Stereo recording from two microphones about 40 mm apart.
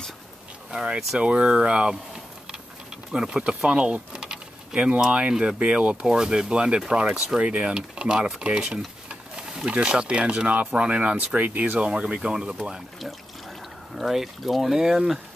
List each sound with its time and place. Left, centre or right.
0.7 s speech: right
3.1 s speech: centre; by 4.2 s right
4.2 s a sound: centre
5.3 s speech: centre
5.6 s speech: right
7.1 s speech: centre
7.4 s speech: right
8.7 s a sound: centre
9.7 s speech: right
11.1 s speech: right
11.8 s speech: right
13.9 s speech: centre